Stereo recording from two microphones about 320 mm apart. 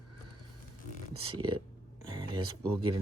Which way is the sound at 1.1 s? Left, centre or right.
Centre.